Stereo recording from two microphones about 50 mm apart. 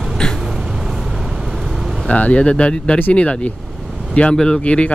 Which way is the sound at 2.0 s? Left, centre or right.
Left.